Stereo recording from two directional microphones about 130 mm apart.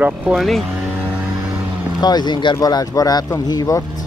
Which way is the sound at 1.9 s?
35° left (ahead or behind).